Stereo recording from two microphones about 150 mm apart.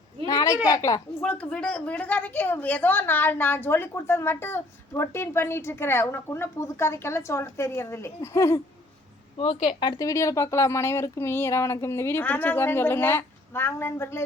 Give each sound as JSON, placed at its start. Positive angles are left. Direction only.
{"t": 0.3, "sound": "a sound", "side_deg": 25}
{"t": 0.7, "sound": "a woman's voice", "side_deg": 20}
{"t": 1.2, "sound": "a woman's voice", "side_deg": 5}
{"t": 9.6, "sound": "a woman's voice", "side_deg": 30}